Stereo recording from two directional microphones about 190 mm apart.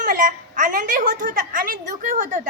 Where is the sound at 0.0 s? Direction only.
45° right (ahead or behind).